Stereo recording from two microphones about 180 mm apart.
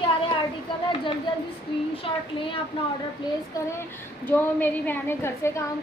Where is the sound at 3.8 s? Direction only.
10° left (ahead or behind).